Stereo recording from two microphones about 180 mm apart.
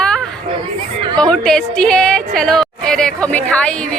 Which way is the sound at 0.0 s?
5° left (ahead or behind).